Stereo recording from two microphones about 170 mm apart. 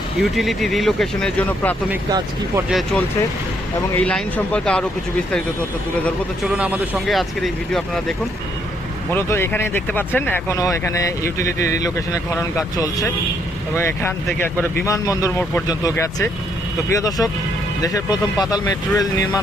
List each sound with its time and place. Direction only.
0.2 s speech: centre (ahead or behind)
2.0 s speech: 20° right (ahead or behind)
2.6 s speech: centre (ahead or behind)
6.0 s speech: 10° left (ahead or behind)
6.5 s speech: 5° right (ahead or behind)
9.1 s speech: 15° left (ahead or behind)